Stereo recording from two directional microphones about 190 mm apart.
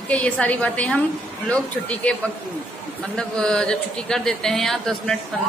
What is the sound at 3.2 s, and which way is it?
A woman's voice, 5° left (ahead or behind).